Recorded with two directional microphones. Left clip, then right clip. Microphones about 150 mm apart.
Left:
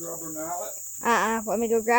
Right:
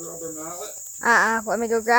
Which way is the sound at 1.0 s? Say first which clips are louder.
Right 5 dB; centre (ahead or behind).